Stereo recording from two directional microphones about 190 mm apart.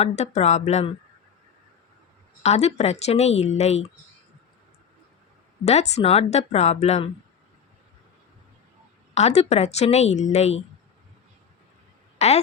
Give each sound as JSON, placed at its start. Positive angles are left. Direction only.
{"t": 0.0, "sound": "speech", "side_deg": 35}
{"t": 2.4, "sound": "speech", "side_deg": 35}
{"t": 5.6, "sound": "speech", "side_deg": 35}
{"t": 9.1, "sound": "speech", "side_deg": 35}
{"t": 12.2, "sound": "speech", "side_deg": 35}